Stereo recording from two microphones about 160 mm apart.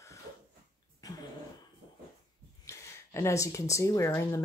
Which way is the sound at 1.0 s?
25° left (ahead or behind).